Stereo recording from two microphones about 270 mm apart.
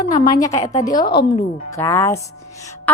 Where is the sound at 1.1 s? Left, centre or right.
Left.